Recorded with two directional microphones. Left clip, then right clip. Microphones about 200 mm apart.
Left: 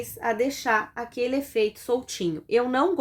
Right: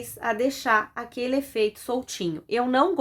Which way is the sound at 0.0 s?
20° right (ahead or behind).